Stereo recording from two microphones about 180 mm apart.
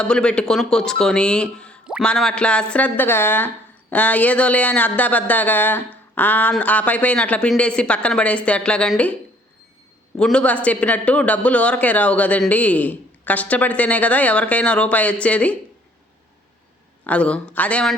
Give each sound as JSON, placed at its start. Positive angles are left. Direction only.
{"t": 0.0, "sound": "speech", "side_deg": 5}
{"t": 10.2, "sound": "speech", "side_deg": 5}
{"t": 17.0, "sound": "speech", "side_deg": 5}